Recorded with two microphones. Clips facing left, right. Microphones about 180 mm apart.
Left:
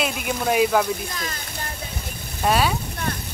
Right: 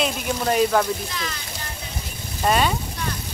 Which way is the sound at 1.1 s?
45° left (ahead or behind).